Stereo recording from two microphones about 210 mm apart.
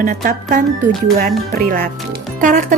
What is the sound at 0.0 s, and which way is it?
Speech, 40° right (ahead or behind).